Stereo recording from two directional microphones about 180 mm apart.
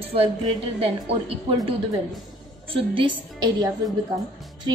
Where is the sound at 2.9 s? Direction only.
25° right (ahead or behind).